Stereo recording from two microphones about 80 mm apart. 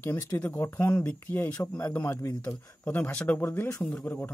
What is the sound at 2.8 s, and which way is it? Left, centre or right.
Speech, left.